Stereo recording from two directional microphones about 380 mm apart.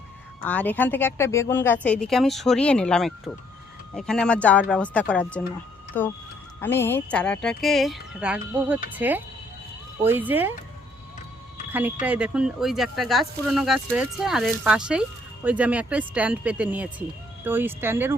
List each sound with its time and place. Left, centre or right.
0.4 s speech: centre
11.7 s speech: centre